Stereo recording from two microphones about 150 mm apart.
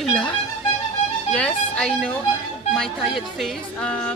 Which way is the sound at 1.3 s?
5° left (ahead or behind).